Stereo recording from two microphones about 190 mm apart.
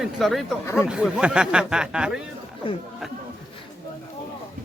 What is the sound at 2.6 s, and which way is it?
Speech, 25° left (ahead or behind).